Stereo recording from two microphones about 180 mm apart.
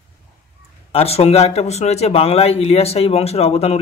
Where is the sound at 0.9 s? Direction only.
35° left (ahead or behind).